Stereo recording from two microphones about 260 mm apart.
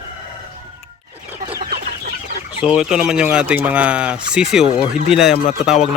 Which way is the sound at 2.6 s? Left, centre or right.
Centre.